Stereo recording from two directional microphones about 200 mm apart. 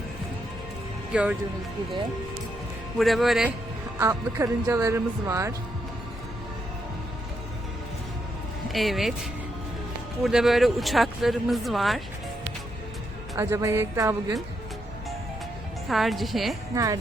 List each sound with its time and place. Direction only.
1.1 s speech: 5° right (ahead or behind)
3.0 s speech: centre (ahead or behind)
4.0 s speech: 15° right (ahead or behind)
8.7 s speech: centre (ahead or behind)
10.2 s speech: centre (ahead or behind)
13.3 s speech: 15° right (ahead or behind)
15.9 s speech: centre (ahead or behind)
16.7 s speech: 15° right (ahead or behind)